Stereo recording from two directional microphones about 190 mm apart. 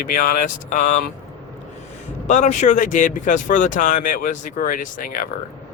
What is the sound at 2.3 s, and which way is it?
Speech, 40° left (ahead or behind).